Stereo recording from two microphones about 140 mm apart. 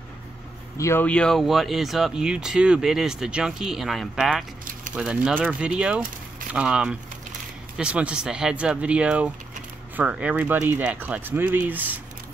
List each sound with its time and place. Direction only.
0.7 s speech: 20° left (ahead or behind)
1.0 s speech: 5° left (ahead or behind); by 12.0 s 10° right (ahead or behind)